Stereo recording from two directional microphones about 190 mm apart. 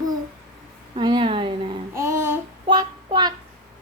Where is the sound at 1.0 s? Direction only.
25° right (ahead or behind).